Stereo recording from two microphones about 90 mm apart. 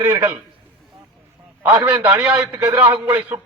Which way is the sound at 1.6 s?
15° right (ahead or behind).